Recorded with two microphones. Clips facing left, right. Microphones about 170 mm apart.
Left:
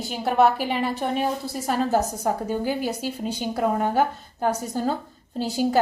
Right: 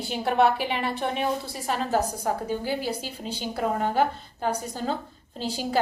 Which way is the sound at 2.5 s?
45° left (ahead or behind).